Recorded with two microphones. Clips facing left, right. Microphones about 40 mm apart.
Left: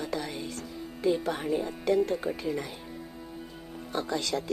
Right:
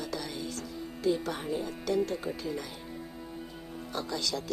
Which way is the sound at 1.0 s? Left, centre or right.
Centre.